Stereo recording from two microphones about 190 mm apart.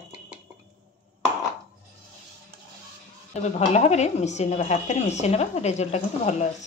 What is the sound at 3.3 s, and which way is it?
A woman's voice, 35° left (ahead or behind).